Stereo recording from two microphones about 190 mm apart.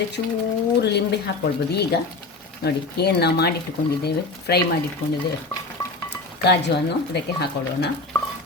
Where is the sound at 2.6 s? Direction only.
60° left (ahead or behind).